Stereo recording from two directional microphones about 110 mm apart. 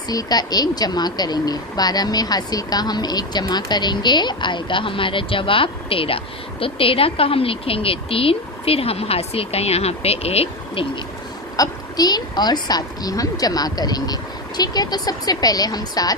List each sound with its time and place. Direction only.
0.1 s a woman's voice: 35° left (ahead or behind); by 10.8 s 65° left (ahead or behind)
11.5 s a woman's voice: 35° left (ahead or behind)